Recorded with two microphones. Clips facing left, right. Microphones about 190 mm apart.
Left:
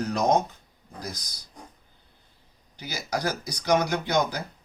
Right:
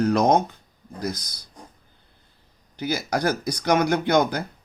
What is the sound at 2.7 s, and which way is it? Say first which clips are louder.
Speech: right 6 dB; 55° right (ahead or behind).